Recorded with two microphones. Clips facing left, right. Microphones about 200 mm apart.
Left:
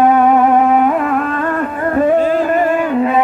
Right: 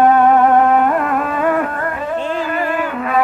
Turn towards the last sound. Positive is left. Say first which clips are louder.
# left 6 dB
turn(degrees=25)  # may be behind; listen again after turning